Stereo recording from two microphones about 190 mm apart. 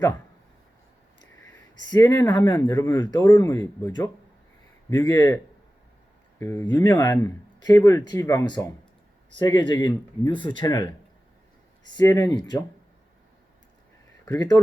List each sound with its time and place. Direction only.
1.9 s speech: 20° left (ahead or behind)
6.4 s speech: 15° left (ahead or behind)
11.9 s speech: 20° left (ahead or behind)
14.3 s speech: 20° left (ahead or behind)